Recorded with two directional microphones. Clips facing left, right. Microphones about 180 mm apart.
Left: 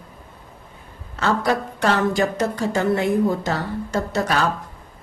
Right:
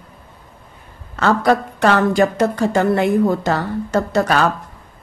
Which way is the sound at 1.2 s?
60° right (ahead or behind).